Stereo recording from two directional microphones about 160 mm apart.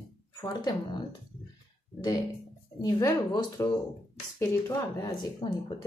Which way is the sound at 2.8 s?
20° left (ahead or behind).